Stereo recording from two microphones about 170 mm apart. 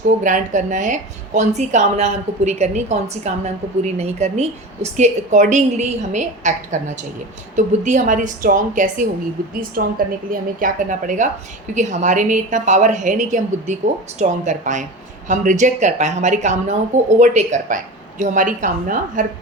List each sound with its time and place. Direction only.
0.2 s a woman's voice: 50° right (ahead or behind)